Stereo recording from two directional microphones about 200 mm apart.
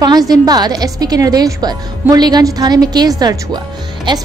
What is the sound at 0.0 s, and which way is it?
A woman's voice, 20° right (ahead or behind).